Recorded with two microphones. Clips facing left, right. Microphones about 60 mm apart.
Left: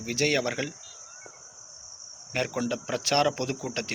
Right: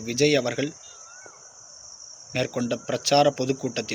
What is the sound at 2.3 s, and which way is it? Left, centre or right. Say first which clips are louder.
Speech: right 3 dB; left.